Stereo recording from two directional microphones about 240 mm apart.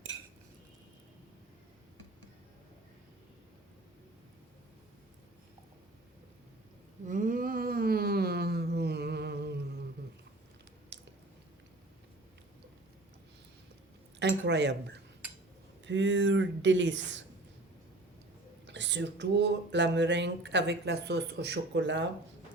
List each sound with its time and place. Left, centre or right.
7.1 s a sound: right
10.9 s squish: right
14.2 s speech: right
18.6 s speech: right